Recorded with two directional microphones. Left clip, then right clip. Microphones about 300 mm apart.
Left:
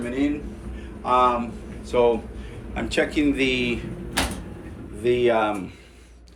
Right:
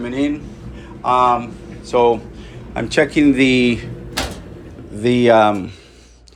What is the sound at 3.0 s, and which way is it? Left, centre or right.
Speech, right.